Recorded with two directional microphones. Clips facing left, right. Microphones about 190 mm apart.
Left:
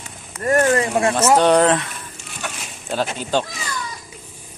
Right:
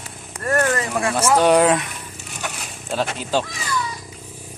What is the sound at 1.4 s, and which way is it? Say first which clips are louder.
Speech: even; 10° right (ahead or behind).